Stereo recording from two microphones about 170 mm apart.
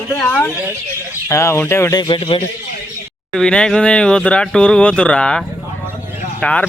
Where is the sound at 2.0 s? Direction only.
30° left (ahead or behind).